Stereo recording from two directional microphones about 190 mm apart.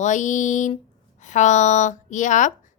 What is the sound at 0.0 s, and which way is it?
A woman's voice, 40° left (ahead or behind).